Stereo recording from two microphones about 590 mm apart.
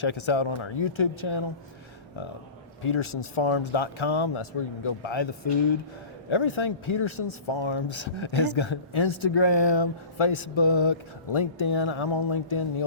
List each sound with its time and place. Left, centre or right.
0.0 s speech: left
2.8 s speech: left
6.3 s speech: left